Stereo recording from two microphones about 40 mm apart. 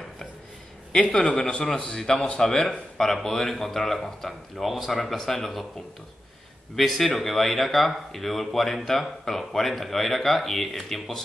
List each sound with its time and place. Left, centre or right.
1.0 s a man's voice: left
6.7 s speech: centre